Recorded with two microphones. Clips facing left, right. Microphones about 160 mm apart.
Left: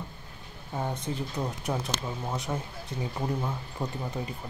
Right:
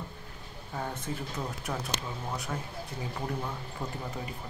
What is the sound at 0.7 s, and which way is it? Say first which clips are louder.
Speech: left 4 dB; 20° left (ahead or behind).